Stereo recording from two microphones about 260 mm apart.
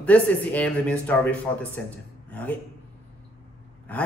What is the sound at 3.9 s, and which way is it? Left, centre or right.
Speech, centre.